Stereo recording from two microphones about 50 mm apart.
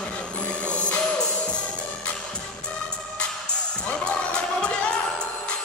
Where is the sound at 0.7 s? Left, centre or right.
Left.